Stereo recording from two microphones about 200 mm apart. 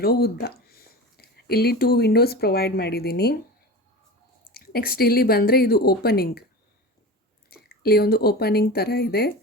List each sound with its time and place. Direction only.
0.0 s speech: 50° left (ahead or behind)
4.5 s speech: 50° left (ahead or behind)
7.5 s speech: 50° left (ahead or behind)